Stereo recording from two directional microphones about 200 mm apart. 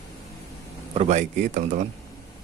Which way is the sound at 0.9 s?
35° right (ahead or behind).